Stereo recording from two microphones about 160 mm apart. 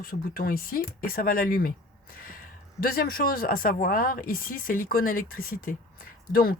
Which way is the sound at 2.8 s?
65° left (ahead or behind).